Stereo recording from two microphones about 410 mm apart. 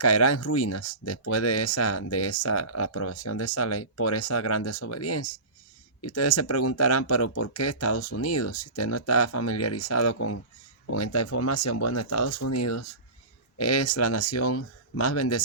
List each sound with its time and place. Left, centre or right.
0.0 s speech: left